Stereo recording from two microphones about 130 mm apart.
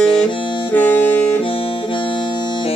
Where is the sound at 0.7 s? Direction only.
15° left (ahead or behind).